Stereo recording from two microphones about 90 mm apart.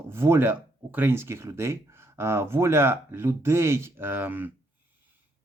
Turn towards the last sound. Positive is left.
turn(degrees=-20)  # may be behind; listen again after turning